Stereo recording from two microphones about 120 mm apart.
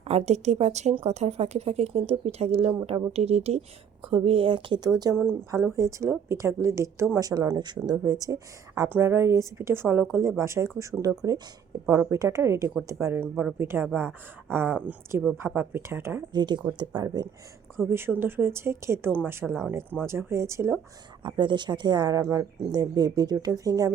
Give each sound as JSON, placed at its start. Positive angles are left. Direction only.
{"t": 0.1, "sound": "speech", "side_deg": -65}
{"t": 5.5, "sound": "speech", "side_deg": -25}
{"t": 16.3, "sound": "a woman's voice", "side_deg": -35}
{"t": 17.8, "sound": "speech", "side_deg": -20}
{"t": 21.2, "sound": "a woman's voice", "side_deg": -40}